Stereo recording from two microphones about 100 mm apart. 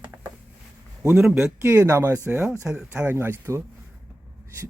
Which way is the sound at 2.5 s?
10° right (ahead or behind).